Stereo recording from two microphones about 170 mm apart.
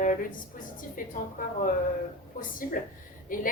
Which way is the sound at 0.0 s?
50° left (ahead or behind).